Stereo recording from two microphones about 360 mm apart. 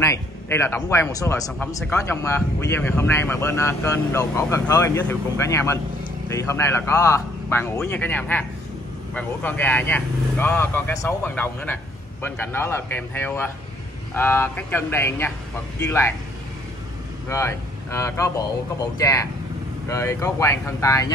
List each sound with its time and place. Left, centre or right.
0.0 s speech: centre
17.3 s speech: centre